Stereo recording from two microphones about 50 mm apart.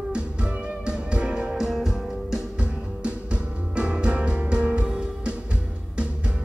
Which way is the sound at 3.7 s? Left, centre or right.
Right.